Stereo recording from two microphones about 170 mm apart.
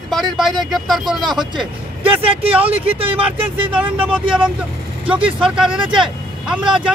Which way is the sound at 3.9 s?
5° right (ahead or behind).